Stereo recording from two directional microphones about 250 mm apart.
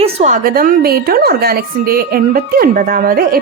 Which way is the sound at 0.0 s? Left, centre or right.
Right.